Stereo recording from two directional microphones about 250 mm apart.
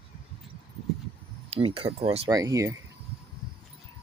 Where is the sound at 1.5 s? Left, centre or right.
Right.